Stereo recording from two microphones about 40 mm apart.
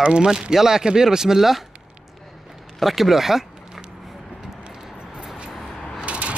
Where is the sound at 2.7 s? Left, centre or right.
Centre.